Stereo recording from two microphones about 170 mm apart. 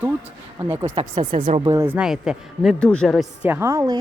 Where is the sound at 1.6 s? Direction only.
20° right (ahead or behind).